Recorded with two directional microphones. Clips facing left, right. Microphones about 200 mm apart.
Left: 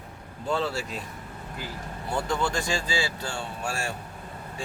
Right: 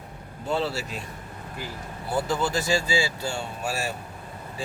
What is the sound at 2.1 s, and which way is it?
Speech, 5° right (ahead or behind).